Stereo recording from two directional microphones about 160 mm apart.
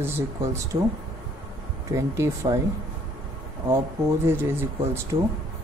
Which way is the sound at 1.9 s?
15° right (ahead or behind).